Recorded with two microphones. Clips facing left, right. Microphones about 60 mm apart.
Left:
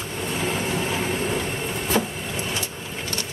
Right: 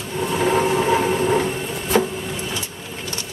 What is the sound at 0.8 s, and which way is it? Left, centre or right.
Train, right.